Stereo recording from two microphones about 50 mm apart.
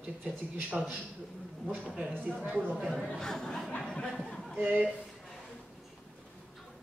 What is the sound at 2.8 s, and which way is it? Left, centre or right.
Speech, centre.